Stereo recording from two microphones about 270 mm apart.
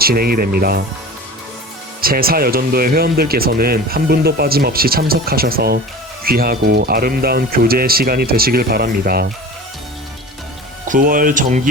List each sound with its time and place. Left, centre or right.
0.0 s speech: right
2.0 s speech: right
10.8 s speech: right